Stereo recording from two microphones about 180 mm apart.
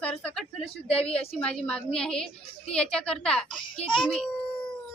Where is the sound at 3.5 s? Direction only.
25° left (ahead or behind).